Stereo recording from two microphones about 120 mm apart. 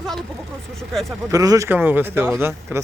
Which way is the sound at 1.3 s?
30° right (ahead or behind).